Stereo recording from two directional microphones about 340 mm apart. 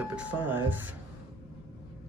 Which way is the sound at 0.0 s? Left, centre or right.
Centre.